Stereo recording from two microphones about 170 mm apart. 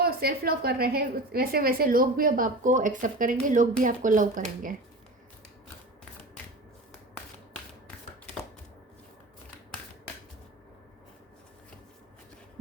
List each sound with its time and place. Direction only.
0.0 s a woman's voice: 65° right (ahead or behind)